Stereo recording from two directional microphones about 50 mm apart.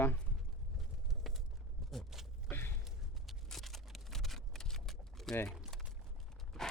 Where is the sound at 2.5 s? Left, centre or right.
Left.